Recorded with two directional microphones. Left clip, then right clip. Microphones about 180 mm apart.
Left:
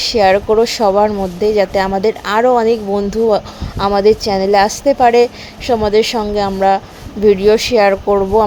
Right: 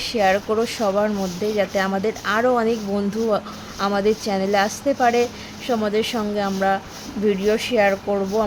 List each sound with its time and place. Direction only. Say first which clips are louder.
0.0 s speech: left 8 dB; 25° left (ahead or behind)